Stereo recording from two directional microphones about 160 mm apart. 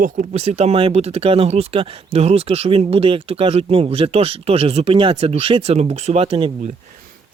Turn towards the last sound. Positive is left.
turn(degrees=-40)  # may be behind; listen again after turning